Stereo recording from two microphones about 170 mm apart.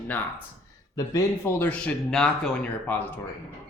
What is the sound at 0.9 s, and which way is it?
A man's voice, 20° left (ahead or behind).